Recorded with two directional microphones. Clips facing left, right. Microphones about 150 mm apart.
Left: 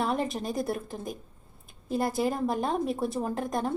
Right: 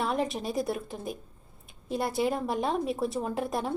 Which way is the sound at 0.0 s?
Centre (ahead or behind).